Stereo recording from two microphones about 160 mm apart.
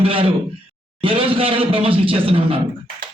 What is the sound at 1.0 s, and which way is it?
A man's voice, 35° right (ahead or behind).